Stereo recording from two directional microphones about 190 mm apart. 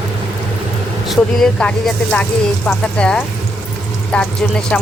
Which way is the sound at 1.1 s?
Centre (ahead or behind).